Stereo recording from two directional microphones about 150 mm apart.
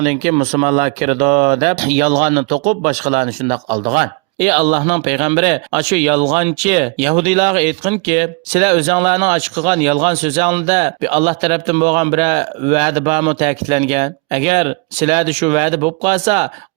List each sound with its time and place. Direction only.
0.0 s speech: 50° right (ahead or behind)